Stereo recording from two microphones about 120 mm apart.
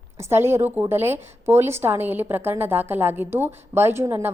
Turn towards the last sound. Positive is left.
turn(degrees=-20)  # may be behind; listen again after turning